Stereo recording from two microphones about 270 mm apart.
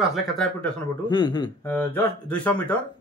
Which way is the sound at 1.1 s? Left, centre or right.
Centre.